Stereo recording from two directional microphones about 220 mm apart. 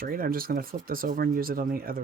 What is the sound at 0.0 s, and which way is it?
Speech, 40° right (ahead or behind).